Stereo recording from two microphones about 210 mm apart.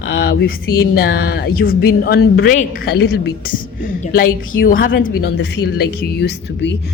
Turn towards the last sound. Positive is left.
turn(degrees=55)  # may be behind; listen again after turning